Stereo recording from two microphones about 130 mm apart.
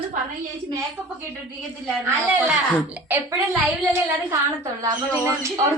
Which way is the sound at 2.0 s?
10° right (ahead or behind).